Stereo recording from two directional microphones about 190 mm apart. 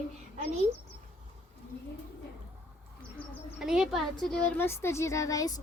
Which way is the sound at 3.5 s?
5° right (ahead or behind).